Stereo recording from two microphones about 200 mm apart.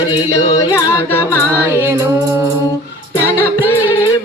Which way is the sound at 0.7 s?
15° left (ahead or behind).